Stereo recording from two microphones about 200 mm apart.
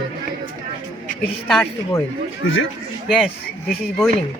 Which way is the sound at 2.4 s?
75° left (ahead or behind).